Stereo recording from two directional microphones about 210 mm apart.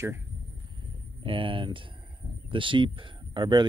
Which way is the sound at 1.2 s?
25° right (ahead or behind).